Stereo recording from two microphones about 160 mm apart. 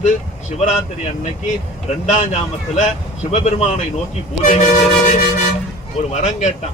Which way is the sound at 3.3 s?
45° left (ahead or behind).